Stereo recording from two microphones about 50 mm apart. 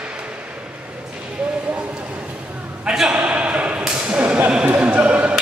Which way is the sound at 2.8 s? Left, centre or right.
Centre.